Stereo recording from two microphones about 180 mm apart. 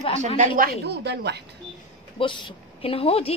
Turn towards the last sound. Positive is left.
turn(degrees=30)  # may be behind; listen again after turning